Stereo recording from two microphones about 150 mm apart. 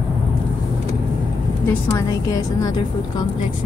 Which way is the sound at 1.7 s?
20° left (ahead or behind).